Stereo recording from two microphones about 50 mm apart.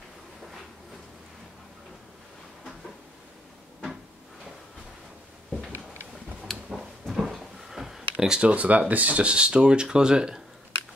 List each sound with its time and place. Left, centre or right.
6.7 s drawer open or close: centre